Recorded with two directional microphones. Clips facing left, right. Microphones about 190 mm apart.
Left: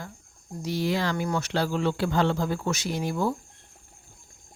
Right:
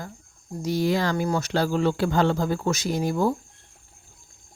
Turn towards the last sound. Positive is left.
turn(degrees=-45)  # may be behind; listen again after turning